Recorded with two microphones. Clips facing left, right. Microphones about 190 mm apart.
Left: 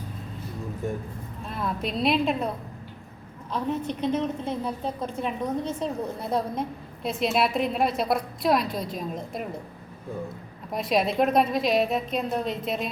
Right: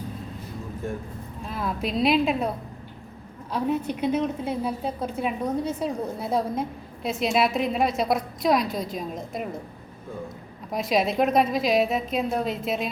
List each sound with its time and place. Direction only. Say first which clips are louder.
1.5 s a woman's voice: right 1 dB; centre (ahead or behind)
3.5 s a woman's voice: right 2 dB; 10° right (ahead or behind)
10.7 s a woman's voice: right 1 dB; centre (ahead or behind)